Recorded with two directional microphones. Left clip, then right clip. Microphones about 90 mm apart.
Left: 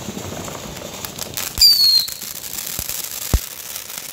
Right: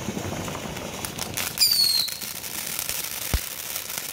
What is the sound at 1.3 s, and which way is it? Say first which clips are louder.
Bird flight: left 9 dB; 20° left (ahead or behind).